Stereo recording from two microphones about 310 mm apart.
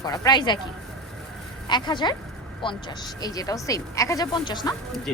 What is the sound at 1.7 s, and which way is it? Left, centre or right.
A woman's voice, centre.